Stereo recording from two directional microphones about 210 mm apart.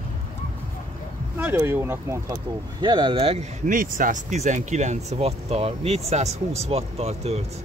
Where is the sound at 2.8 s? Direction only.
20° right (ahead or behind).